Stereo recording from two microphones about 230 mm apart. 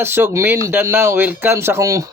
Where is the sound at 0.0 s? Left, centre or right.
Centre.